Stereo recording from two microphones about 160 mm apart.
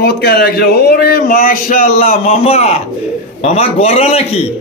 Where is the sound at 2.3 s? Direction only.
40° left (ahead or behind).